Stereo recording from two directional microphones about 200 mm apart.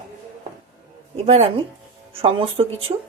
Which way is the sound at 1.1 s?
30° right (ahead or behind).